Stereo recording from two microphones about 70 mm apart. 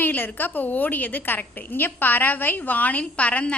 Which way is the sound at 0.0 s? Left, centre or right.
Left.